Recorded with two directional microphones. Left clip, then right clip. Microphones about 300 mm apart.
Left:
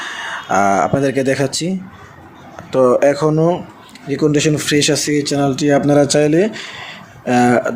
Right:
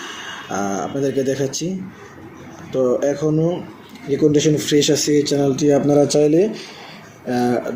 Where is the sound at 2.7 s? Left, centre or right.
Left.